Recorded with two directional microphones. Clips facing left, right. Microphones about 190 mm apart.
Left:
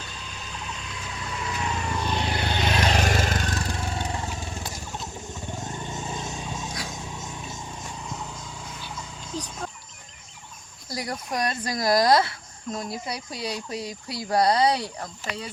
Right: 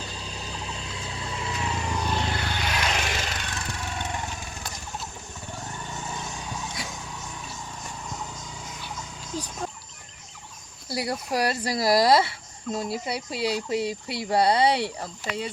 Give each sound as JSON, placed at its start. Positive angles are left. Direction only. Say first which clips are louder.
{"t": 0.0, "sound": "vehicle", "louder": "right 3 dB", "side_deg": -30}
{"t": 2.2, "sound": "vehicle", "louder": "left 3 dB", "side_deg": 20}
{"t": 10.8, "sound": "a sound", "louder": "right 3 dB", "side_deg": -30}
{"t": 11.3, "sound": "speech", "louder": "right 1 dB", "side_deg": -30}